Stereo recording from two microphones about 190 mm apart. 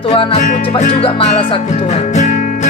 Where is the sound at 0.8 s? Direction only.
40° left (ahead or behind).